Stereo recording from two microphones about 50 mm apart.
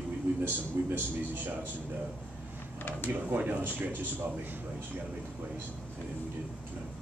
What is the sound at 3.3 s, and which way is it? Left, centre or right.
Speech, right.